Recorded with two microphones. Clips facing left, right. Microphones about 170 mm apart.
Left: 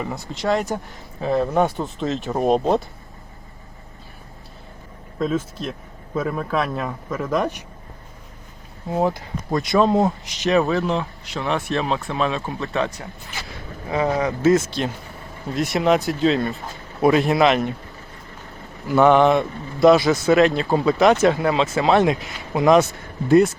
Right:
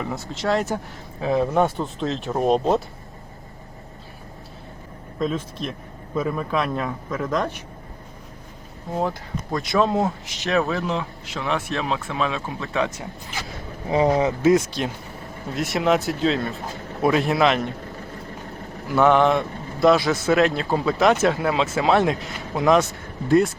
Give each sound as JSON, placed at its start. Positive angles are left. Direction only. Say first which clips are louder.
{"t": 0.0, "sound": "speech", "louder": "left 1 dB", "side_deg": 0}
{"t": 5.2, "sound": "speech", "louder": "left 2 dB", "side_deg": 5}
{"t": 8.9, "sound": "speech", "louder": "left 4 dB", "side_deg": 10}
{"t": 13.9, "sound": "speech", "louder": "right 2 dB", "side_deg": -30}
{"t": 14.4, "sound": "speech", "louder": "left 3 dB", "side_deg": -10}
{"t": 18.9, "sound": "speech", "louder": "left 3 dB", "side_deg": 0}